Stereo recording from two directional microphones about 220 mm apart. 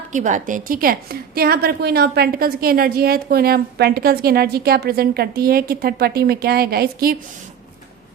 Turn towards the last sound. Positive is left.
turn(degrees=-45)  # may be behind; listen again after turning